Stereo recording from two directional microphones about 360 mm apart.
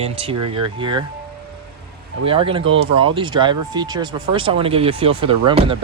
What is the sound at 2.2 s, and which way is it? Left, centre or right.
Speech, centre.